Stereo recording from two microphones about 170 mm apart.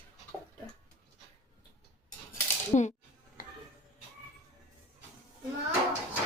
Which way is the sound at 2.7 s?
40° left (ahead or behind).